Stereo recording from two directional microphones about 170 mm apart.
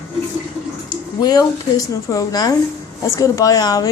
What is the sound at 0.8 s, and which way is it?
A woman's voice, 20° left (ahead or behind).